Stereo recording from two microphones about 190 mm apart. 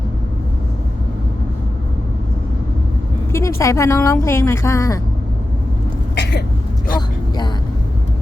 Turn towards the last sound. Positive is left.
turn(degrees=20)  # may be behind; listen again after turning